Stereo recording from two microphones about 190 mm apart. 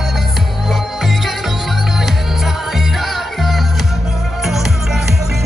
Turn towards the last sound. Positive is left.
turn(degrees=0)  # may be behind; listen again after turning